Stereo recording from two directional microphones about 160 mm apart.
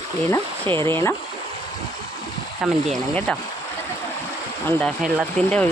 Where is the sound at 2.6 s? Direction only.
5° right (ahead or behind).